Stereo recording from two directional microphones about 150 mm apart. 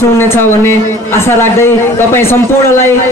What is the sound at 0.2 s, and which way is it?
A man's voice, 15° left (ahead or behind).